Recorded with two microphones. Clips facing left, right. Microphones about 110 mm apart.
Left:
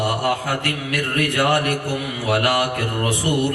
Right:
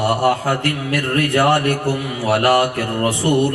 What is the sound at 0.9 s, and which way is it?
Mantra, 30° right (ahead or behind).